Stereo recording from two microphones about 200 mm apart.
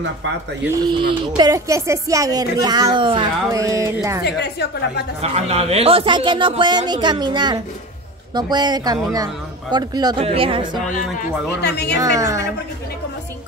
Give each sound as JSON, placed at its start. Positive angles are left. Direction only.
{"t": 0.7, "sound": "speech", "side_deg": -25}
{"t": 4.2, "sound": "a woman's voice", "side_deg": 55}
{"t": 5.2, "sound": "speech", "side_deg": -30}
{"t": 11.6, "sound": "a woman's voice", "side_deg": 55}
{"t": 12.0, "sound": "speech", "side_deg": -15}